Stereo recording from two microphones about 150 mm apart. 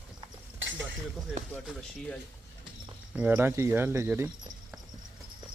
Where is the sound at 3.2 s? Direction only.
10° right (ahead or behind).